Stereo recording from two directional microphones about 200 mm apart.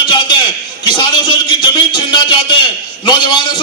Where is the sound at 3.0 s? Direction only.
25° left (ahead or behind).